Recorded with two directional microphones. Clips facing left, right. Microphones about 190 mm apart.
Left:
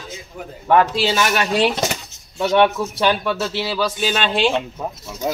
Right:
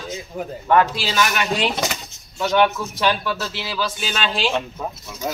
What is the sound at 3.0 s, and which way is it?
Speech, 25° left (ahead or behind).